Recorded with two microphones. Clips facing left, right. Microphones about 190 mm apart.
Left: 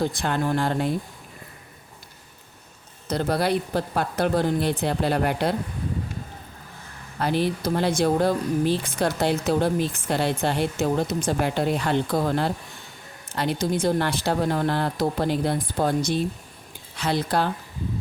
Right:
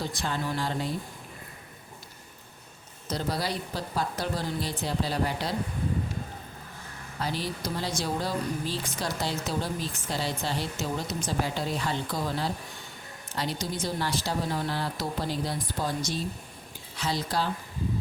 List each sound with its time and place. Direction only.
0.0 s speech: 55° left (ahead or behind)
3.1 s speech: 55° left (ahead or behind)
7.2 s speech: 60° left (ahead or behind)